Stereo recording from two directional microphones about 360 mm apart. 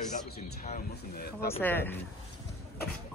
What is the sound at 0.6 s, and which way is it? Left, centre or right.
Speech, left.